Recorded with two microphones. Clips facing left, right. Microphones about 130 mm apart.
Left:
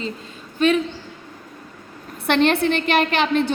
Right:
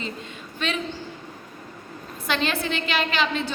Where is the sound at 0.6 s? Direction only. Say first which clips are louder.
Left 11 dB; 40° left (ahead or behind).